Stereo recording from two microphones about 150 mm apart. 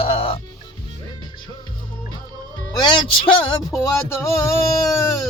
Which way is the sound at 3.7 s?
20° left (ahead or behind).